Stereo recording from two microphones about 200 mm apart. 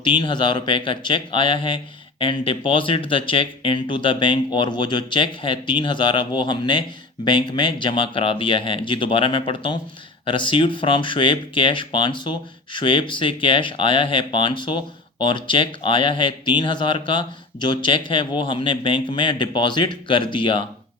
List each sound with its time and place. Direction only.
0.0 s speech: 25° left (ahead or behind)